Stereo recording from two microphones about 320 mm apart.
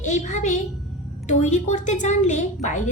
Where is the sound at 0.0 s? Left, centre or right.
Left.